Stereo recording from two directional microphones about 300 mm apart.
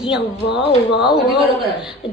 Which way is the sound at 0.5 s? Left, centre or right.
Centre.